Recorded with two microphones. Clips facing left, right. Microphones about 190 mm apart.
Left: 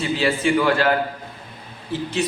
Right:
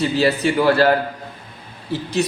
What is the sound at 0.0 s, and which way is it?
Speech, 40° right (ahead or behind).